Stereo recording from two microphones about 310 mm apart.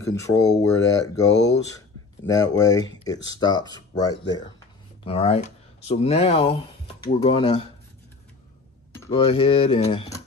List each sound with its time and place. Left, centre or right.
0.0 s speech: centre
1.3 s speech: left
2.2 s speech: centre
8.9 s speech: centre